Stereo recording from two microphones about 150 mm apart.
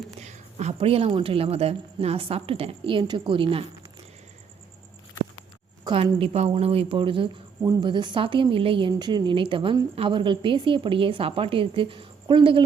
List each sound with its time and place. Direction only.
0.2 s speech: 45° right (ahead or behind)
5.8 s speech: 35° right (ahead or behind)